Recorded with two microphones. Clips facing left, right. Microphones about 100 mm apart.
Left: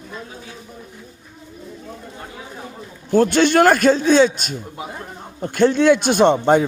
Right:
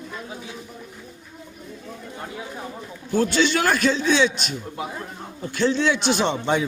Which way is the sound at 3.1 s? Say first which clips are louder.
Left 6 dB; 50° left (ahead or behind).